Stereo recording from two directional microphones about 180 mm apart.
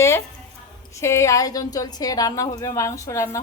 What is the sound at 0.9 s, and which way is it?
A woman's voice, 15° left (ahead or behind).